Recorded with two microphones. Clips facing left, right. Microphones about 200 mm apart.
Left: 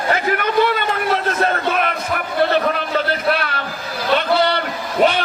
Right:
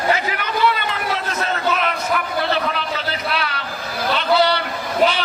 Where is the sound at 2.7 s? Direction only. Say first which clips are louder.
Left 5 dB; 50° left (ahead or behind).